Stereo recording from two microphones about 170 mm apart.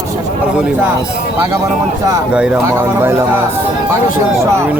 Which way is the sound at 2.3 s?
5° right (ahead or behind).